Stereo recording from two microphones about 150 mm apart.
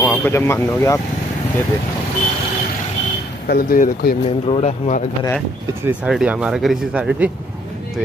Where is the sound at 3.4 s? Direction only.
85° left.